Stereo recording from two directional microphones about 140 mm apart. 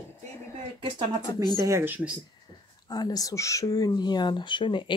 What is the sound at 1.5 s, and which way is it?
Speech, 20° right (ahead or behind).